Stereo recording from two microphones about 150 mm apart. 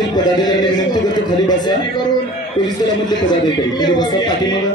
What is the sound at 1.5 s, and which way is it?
Speech, 30° left (ahead or behind).